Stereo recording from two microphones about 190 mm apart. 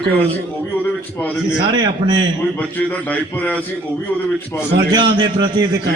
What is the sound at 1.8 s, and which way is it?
Speech, 20° right (ahead or behind).